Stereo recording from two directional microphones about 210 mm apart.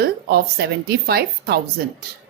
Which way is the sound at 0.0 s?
50° right (ahead or behind).